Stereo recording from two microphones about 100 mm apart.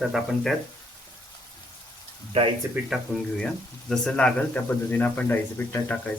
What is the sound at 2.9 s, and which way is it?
Speech, 5° right (ahead or behind).